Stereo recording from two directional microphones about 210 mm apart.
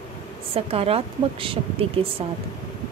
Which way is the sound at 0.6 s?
30° right (ahead or behind).